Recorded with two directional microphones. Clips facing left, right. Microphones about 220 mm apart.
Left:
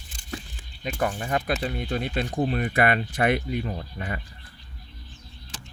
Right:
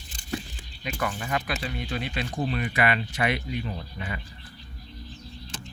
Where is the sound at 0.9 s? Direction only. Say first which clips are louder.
Left 3 dB; 40° left (ahead or behind).